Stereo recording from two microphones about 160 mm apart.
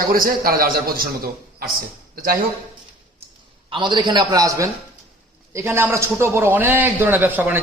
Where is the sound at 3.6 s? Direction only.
30° right (ahead or behind); by 7.6 s 10° right (ahead or behind).